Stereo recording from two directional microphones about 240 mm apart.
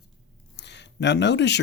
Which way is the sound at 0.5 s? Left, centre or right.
Left.